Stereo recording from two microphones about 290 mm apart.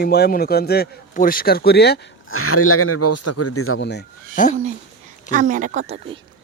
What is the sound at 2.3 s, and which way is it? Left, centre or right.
Speech, left.